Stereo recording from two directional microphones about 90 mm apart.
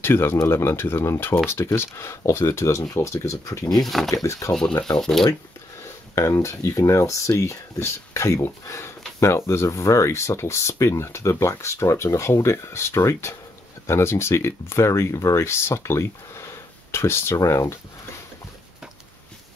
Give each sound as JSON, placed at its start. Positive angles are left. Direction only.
{"t": 0.0, "sound": "speech", "side_deg": 25}
{"t": 3.7, "sound": "speech", "side_deg": 0}
{"t": 4.1, "sound": "speech", "side_deg": 40}
{"t": 4.9, "sound": "speech", "side_deg": 5}
{"t": 6.1, "sound": "speech", "side_deg": 30}